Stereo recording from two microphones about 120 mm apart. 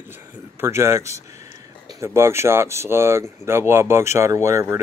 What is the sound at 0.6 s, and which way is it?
Speech, 20° right (ahead or behind).